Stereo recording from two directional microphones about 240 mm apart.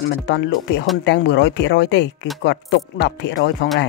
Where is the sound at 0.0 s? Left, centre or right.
Left.